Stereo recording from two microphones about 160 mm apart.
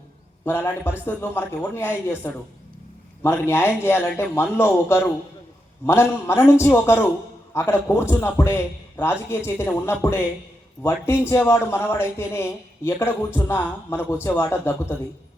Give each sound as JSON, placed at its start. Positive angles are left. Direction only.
{"t": 0.4, "sound": "a man's voice", "side_deg": 15}